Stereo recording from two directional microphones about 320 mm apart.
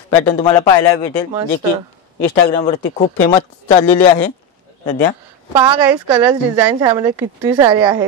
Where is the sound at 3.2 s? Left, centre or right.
Centre.